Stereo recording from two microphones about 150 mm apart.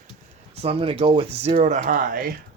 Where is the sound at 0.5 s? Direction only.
40° right (ahead or behind); by 2.3 s 70° right (ahead or behind).